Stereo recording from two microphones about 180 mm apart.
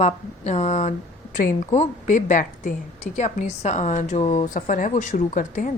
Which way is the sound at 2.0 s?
45° left (ahead or behind).